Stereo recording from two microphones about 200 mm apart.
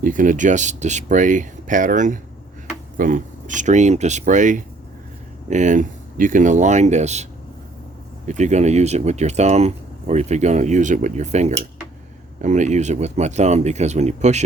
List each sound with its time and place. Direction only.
0.0 s speech: 40° right (ahead or behind)
8.3 s speech: 35° right (ahead or behind)